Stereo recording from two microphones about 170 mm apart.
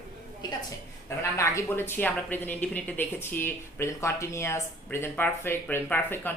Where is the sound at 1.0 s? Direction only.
15° left (ahead or behind).